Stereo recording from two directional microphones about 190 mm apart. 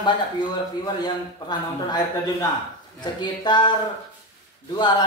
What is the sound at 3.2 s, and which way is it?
Speech, 25° left (ahead or behind).